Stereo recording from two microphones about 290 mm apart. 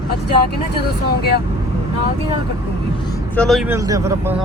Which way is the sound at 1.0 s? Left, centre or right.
Left.